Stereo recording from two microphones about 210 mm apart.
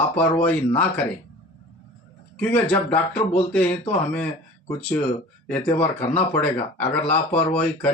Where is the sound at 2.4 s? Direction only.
5° left (ahead or behind).